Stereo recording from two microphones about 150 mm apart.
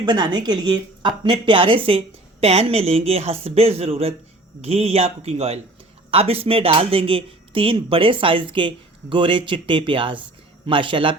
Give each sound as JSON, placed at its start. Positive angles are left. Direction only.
{"t": 0.0, "sound": "speech", "side_deg": -30}